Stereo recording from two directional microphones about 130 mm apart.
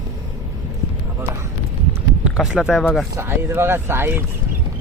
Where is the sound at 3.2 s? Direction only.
20° right (ahead or behind).